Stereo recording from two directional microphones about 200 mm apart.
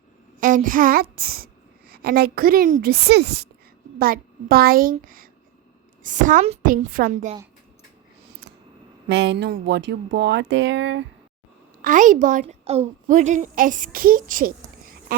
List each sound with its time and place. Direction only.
0.3 s a woman's voice: 40° right (ahead or behind)
8.3 s a sound: 55° right (ahead or behind)
9.0 s speech: 60° right (ahead or behind)
11.8 s a woman's voice: 40° right (ahead or behind)